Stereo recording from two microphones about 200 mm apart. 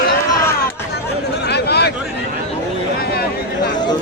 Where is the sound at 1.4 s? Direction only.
55° left (ahead or behind).